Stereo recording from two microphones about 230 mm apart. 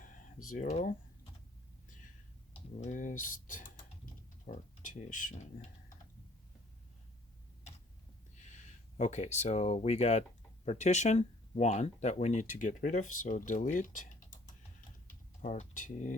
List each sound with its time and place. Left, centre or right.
0.0 s a sound: left
2.8 s speech: left
8.4 s speech: left
15.0 s typing: left